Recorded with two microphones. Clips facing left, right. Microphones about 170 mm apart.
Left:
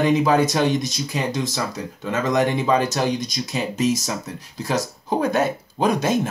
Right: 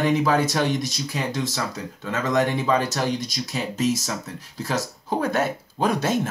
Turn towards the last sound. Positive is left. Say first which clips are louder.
# left 2 dB
turn(degrees=15)  # may be behind; listen again after turning